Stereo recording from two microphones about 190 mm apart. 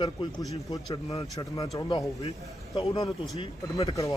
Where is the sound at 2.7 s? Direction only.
25° left (ahead or behind).